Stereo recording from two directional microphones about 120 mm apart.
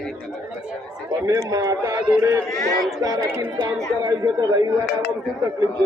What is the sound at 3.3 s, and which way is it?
Speech, 25° right (ahead or behind).